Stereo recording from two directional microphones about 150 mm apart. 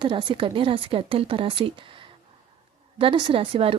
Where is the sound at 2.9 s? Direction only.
35° right (ahead or behind).